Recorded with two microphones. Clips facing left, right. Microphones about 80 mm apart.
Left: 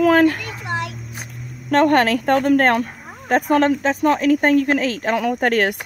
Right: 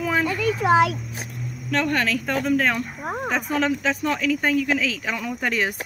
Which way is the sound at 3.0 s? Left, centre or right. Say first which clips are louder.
Right 10 dB; right.